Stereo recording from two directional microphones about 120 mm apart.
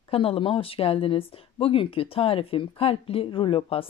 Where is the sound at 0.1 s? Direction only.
50° left (ahead or behind).